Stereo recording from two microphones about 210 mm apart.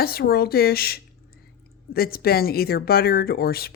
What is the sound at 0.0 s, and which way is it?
Speech, 45° left (ahead or behind).